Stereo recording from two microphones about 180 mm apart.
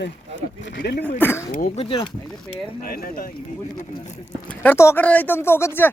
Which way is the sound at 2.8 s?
55° left (ahead or behind).